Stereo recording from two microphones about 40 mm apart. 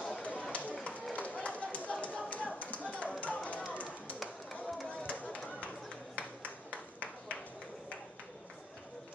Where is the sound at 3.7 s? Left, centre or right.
Left.